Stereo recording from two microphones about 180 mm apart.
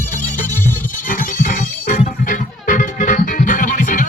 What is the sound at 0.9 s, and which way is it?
Music, 50° left (ahead or behind).